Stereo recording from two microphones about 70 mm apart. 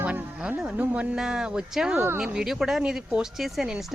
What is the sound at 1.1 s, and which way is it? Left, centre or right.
Speech, centre.